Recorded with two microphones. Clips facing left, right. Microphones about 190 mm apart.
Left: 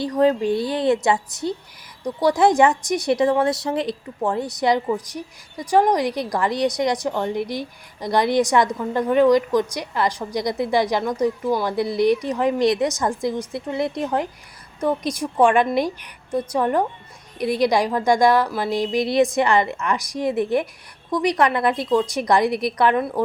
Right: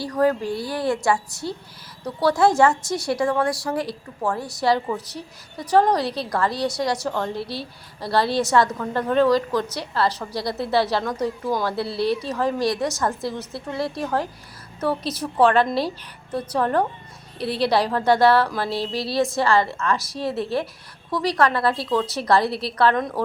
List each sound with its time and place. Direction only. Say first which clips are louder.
0.0 s a woman's voice: left 3 dB; 20° left (ahead or behind)